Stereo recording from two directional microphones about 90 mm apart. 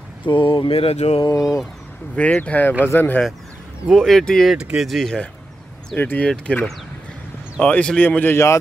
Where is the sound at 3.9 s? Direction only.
5° left (ahead or behind).